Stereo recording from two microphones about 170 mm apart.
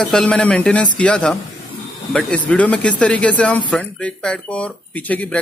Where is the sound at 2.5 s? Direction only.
10° left (ahead or behind).